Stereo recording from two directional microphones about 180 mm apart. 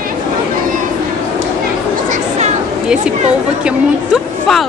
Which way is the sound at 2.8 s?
5° right (ahead or behind).